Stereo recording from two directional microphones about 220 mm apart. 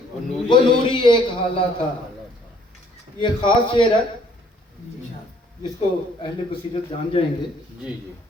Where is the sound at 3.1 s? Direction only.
20° left (ahead or behind).